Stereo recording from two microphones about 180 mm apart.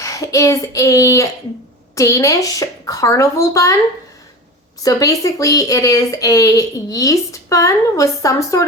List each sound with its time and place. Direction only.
0.0 s speech: 20° left (ahead or behind)
4.8 s speech: 20° left (ahead or behind)